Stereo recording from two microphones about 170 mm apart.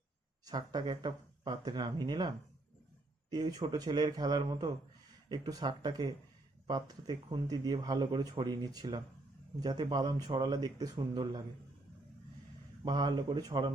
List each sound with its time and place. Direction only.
0.4 s speech: 25° right (ahead or behind)
12.8 s speech: 25° right (ahead or behind)